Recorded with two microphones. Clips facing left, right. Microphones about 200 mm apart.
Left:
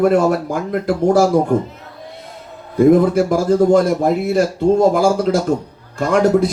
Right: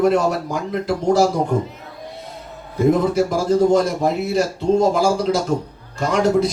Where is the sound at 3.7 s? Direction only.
55° left (ahead or behind).